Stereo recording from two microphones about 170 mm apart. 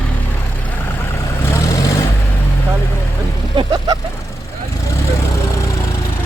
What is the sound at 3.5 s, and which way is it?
Vehicle, 25° right (ahead or behind).